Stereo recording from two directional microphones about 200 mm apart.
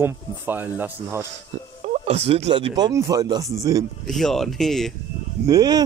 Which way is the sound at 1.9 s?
30° right (ahead or behind).